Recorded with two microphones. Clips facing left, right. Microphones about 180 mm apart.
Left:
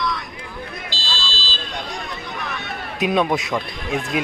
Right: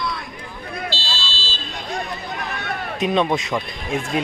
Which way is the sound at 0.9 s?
40° left (ahead or behind).